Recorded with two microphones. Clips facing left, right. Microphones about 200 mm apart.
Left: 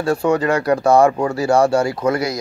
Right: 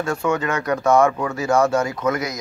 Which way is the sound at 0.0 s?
35° left (ahead or behind).